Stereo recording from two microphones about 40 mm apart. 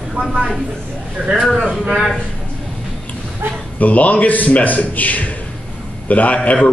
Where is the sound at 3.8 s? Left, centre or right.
Left.